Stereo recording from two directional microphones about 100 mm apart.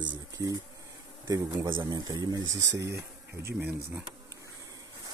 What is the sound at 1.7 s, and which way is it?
Speech, 50° right (ahead or behind).